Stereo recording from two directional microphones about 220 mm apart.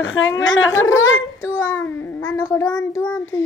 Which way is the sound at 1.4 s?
15° left (ahead or behind).